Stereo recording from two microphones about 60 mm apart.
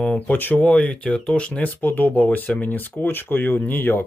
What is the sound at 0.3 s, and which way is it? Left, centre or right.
Speech, left.